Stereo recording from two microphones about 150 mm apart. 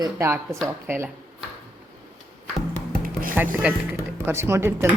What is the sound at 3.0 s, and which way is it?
Music, 70° right (ahead or behind).